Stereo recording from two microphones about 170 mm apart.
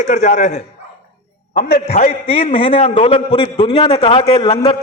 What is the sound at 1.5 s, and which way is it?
Speech, 65° left (ahead or behind).